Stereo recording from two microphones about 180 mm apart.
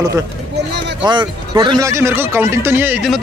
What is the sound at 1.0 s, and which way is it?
Speech, 25° right (ahead or behind).